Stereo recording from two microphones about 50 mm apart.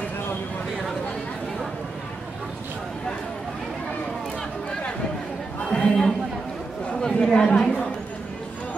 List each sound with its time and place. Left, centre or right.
5.7 s a sound: centre
6.9 s chatter: centre
7.3 s speech: centre